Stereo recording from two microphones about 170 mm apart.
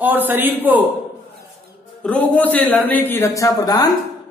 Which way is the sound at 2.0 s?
10° left (ahead or behind).